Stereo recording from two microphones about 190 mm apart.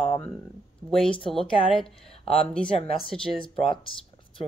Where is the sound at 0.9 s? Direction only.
25° left (ahead or behind).